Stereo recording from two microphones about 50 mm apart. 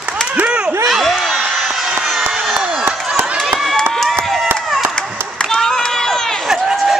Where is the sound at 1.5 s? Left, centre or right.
Centre.